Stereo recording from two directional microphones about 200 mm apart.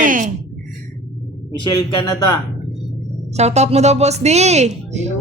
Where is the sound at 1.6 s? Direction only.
20° left (ahead or behind).